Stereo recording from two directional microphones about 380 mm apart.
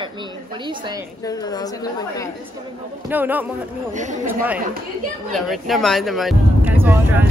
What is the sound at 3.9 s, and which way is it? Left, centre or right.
Speech, centre.